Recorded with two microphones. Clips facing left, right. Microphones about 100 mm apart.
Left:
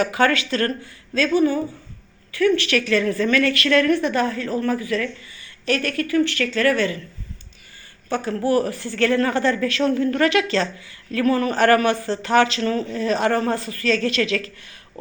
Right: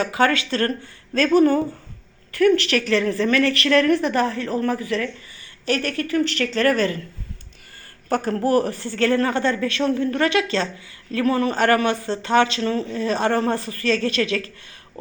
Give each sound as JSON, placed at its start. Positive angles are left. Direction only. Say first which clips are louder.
{"t": 0.0, "sound": "a woman's voice", "louder": "left 1 dB", "side_deg": -25}
{"t": 1.3, "sound": "speech", "louder": "right 3 dB", "side_deg": -55}
{"t": 2.6, "sound": "a woman's voice", "louder": "even", "side_deg": -35}
{"t": 8.1, "sound": "a woman's voice", "louder": "right 1 dB", "side_deg": -40}